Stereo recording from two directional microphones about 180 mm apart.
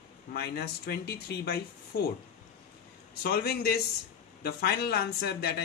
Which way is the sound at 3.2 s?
60° left (ahead or behind).